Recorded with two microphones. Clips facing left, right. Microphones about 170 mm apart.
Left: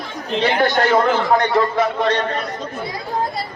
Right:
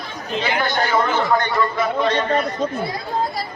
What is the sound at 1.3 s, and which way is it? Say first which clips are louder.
Speech: left 3 dB; 85° left.